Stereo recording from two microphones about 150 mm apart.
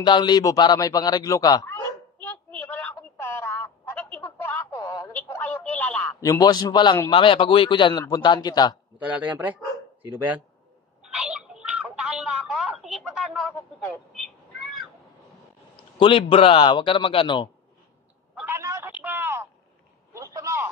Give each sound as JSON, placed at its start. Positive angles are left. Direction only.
{"t": 0.0, "sound": "a man's voice", "side_deg": 30}
{"t": 2.2, "sound": "telephone", "side_deg": 10}
{"t": 5.3, "sound": "a sound", "side_deg": 10}
{"t": 6.2, "sound": "a man's voice", "side_deg": 25}
{"t": 9.0, "sound": "speech", "side_deg": -10}
{"t": 11.1, "sound": "telephone", "side_deg": -5}
{"t": 13.3, "sound": "a sound", "side_deg": 5}
{"t": 14.1, "sound": "cat", "side_deg": 0}
{"t": 16.0, "sound": "a man's voice", "side_deg": 35}
{"t": 18.5, "sound": "telephone", "side_deg": -20}
{"t": 20.2, "sound": "vehicle", "side_deg": -20}